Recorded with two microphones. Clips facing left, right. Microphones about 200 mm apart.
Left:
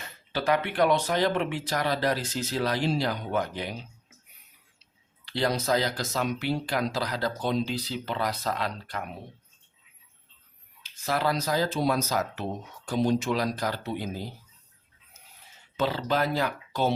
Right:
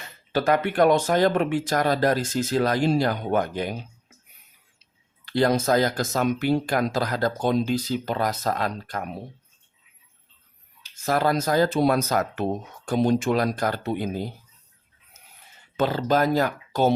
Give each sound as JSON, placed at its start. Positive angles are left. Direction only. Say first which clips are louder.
{"t": 0.3, "sound": "speech", "louder": "right 4 dB", "side_deg": -50}
{"t": 5.2, "sound": "speech", "louder": "right 6 dB", "side_deg": -50}
{"t": 10.8, "sound": "speech", "louder": "right 5 dB", "side_deg": -45}
{"t": 15.8, "sound": "speech", "louder": "right 5 dB", "side_deg": -50}